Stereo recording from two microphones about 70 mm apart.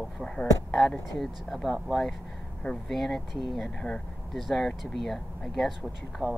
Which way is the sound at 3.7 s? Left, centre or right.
Centre.